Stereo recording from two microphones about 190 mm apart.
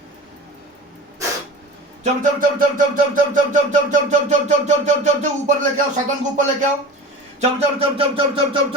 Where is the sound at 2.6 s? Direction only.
45° right (ahead or behind).